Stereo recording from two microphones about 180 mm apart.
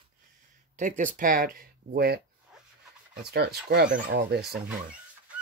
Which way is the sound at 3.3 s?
65° right (ahead or behind).